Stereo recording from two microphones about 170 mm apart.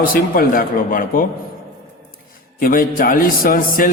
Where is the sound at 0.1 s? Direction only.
60° left (ahead or behind).